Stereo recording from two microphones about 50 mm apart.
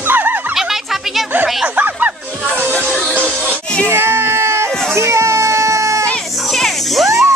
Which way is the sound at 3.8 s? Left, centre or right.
Right.